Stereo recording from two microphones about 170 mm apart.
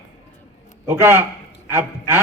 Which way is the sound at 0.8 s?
15° right (ahead or behind).